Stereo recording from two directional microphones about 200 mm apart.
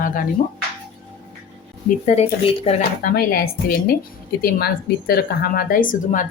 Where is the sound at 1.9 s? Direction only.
35° left (ahead or behind).